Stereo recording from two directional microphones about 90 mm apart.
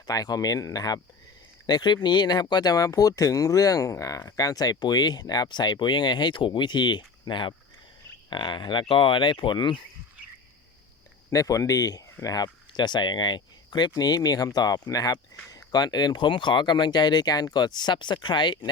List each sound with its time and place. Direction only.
0.1 s speech: 45° left (ahead or behind); by 9.8 s 60° left (ahead or behind)
11.3 s speech: 40° left (ahead or behind); by 18.7 s 60° left (ahead or behind)